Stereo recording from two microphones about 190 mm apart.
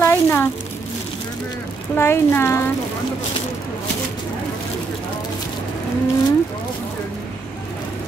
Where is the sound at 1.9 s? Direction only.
10° left (ahead or behind).